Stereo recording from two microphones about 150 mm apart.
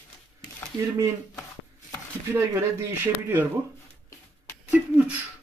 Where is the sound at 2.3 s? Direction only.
15° right (ahead or behind).